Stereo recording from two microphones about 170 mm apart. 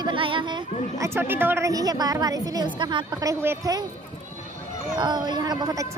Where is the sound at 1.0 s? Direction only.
15° right (ahead or behind).